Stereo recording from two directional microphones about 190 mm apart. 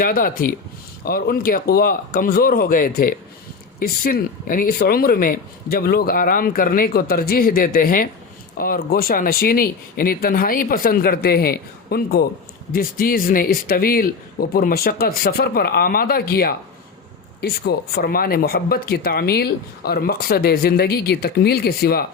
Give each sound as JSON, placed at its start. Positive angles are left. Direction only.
{"t": 0.0, "sound": "speech", "side_deg": 50}